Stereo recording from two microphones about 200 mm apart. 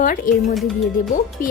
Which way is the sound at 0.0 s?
45° left (ahead or behind).